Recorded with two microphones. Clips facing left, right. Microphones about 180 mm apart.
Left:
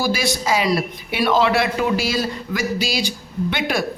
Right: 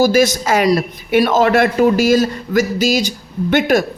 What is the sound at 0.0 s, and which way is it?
A woman's voice, 45° right (ahead or behind).